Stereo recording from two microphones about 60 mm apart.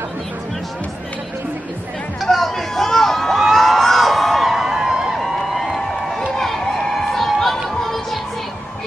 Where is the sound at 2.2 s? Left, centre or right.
Centre.